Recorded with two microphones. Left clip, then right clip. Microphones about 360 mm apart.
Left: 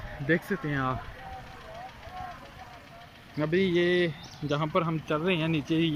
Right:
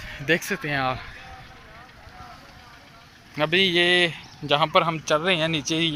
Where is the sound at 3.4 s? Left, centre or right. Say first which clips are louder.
Right 6 dB; centre.